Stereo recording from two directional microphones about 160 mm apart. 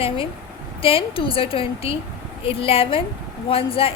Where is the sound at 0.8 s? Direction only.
35° left (ahead or behind).